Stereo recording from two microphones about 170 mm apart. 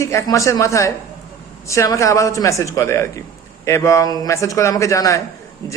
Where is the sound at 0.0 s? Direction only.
15° left (ahead or behind).